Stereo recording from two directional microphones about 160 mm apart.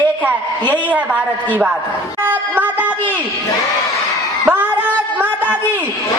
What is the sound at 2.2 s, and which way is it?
Speech, 10° right (ahead or behind).